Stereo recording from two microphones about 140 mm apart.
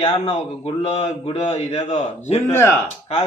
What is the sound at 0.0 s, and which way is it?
A man's voice, 45° left (ahead or behind).